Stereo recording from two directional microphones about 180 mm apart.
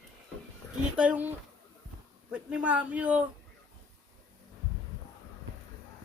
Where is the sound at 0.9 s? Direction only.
5° right (ahead or behind).